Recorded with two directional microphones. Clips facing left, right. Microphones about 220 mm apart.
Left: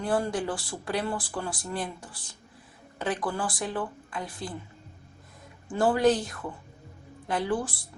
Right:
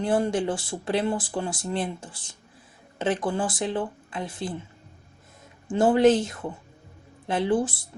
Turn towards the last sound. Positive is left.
turn(degrees=-25)  # may be behind; listen again after turning